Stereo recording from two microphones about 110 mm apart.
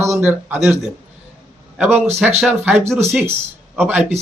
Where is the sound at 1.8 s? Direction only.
15° right (ahead or behind).